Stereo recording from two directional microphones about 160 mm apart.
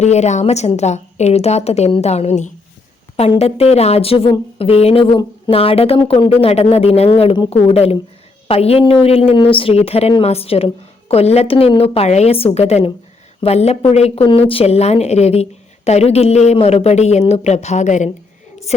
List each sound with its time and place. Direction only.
0.0 s a woman's voice: 45° left (ahead or behind)